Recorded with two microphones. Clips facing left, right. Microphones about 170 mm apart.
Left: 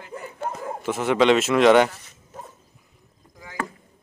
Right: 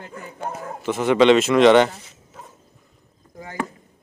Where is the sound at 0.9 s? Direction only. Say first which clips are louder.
Right 3 dB; centre (ahead or behind).